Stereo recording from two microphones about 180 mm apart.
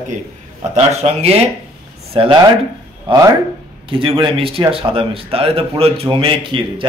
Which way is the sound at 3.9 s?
30° right (ahead or behind).